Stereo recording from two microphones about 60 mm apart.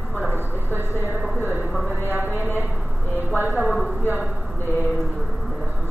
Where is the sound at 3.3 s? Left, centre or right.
Right.